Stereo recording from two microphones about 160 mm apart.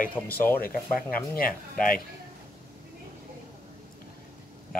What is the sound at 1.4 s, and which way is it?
Speech, 65° left (ahead or behind).